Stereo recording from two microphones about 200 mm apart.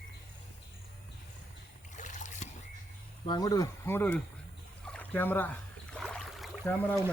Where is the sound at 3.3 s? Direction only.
20° left (ahead or behind).